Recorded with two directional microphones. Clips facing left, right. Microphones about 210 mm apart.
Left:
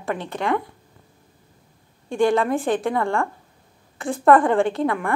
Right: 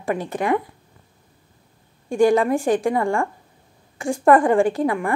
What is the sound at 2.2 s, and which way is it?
A woman's voice, 15° right (ahead or behind).